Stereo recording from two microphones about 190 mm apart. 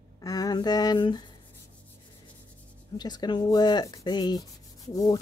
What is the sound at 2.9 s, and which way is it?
Rub, 20° left (ahead or behind).